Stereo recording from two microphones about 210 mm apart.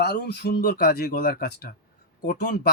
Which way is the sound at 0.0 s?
50° left (ahead or behind).